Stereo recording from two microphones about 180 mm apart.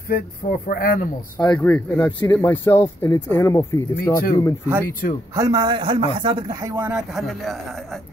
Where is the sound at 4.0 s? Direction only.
55° left (ahead or behind).